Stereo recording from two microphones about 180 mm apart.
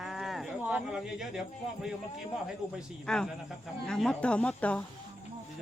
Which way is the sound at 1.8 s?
5° right (ahead or behind).